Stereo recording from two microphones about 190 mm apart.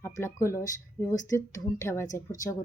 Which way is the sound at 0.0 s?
15° left (ahead or behind).